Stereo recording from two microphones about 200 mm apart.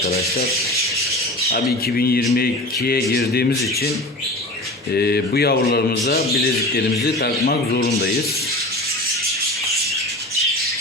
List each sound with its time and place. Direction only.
2.0 s a man's voice: 50° left (ahead or behind)
4.9 s a man's voice: 55° left (ahead or behind)